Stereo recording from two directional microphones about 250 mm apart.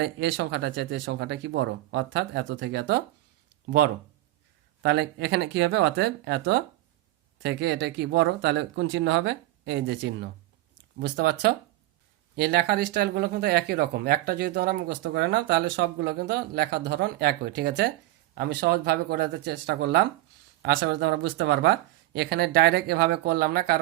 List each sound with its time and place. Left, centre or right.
0.0 s speech: right